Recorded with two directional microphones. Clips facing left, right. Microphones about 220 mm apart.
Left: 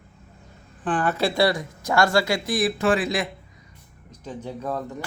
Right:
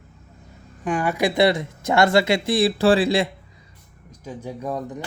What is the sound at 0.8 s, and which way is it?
Speech, 10° right (ahead or behind).